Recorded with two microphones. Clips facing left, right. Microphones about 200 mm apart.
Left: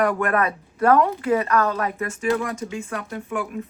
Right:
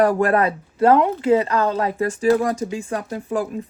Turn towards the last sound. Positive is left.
turn(degrees=-35)  # may be behind; listen again after turning